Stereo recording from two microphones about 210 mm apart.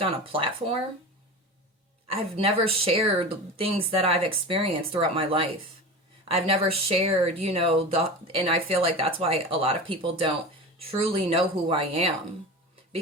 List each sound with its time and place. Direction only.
0.0 s speech: 25° right (ahead or behind)
2.3 s speech: 30° right (ahead or behind)